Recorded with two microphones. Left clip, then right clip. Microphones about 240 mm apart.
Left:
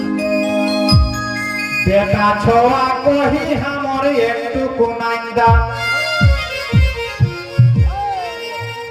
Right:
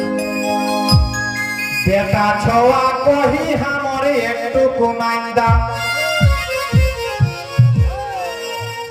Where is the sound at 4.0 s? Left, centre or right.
Right.